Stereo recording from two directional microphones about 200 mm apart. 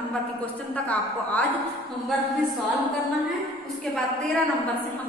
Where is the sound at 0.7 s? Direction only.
5° left (ahead or behind).